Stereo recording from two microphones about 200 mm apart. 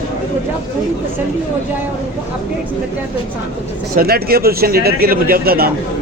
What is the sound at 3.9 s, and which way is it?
A man's voice, 50° right (ahead or behind).